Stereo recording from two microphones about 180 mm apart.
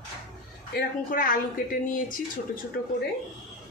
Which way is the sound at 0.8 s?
55° left (ahead or behind).